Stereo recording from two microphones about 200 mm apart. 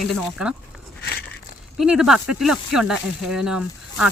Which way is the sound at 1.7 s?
5° right (ahead or behind).